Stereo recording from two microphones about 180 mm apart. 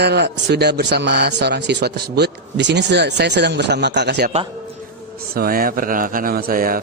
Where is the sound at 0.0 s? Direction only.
70° right (ahead or behind).